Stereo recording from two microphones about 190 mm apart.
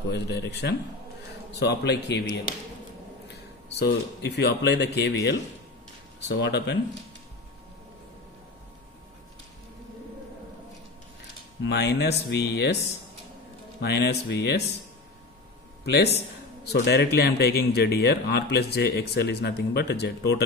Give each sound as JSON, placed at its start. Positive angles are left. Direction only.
{"t": 0.1, "sound": "speech", "side_deg": 60}
{"t": 3.8, "sound": "speech", "side_deg": 60}
{"t": 11.6, "sound": "speech", "side_deg": 65}
{"t": 13.7, "sound": "speech", "side_deg": 60}
{"t": 15.8, "sound": "a man's voice", "side_deg": 60}